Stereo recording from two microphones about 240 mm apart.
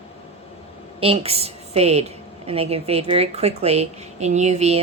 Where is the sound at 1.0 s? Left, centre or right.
Right.